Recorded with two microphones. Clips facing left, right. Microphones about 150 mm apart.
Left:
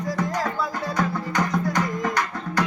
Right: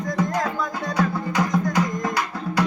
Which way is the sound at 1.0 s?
5° right (ahead or behind).